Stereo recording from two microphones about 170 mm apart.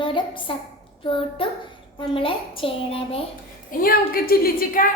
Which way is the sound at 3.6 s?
60° left (ahead or behind).